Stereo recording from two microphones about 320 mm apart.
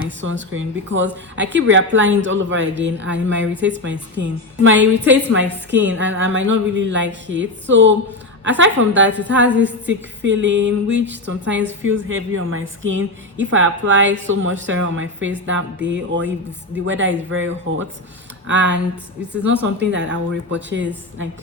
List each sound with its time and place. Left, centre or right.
0.2 s a woman's voice: right